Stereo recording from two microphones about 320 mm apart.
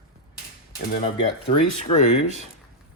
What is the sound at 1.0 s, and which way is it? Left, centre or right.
Speech, left.